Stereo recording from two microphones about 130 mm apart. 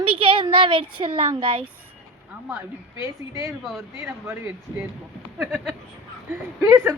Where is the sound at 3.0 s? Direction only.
25° right (ahead or behind).